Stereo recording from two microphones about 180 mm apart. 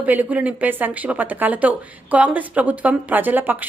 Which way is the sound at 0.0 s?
10° right (ahead or behind).